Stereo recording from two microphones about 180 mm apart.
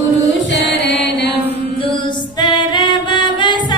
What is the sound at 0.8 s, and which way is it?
Music, 75° left (ahead or behind).